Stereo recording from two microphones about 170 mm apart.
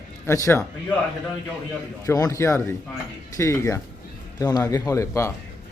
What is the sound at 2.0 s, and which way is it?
Speech, 20° left (ahead or behind).